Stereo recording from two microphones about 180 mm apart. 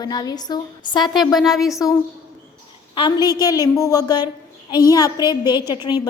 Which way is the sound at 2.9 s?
25° left (ahead or behind).